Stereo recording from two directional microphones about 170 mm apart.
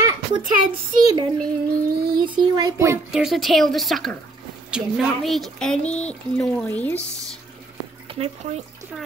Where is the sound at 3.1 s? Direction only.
Centre (ahead or behind).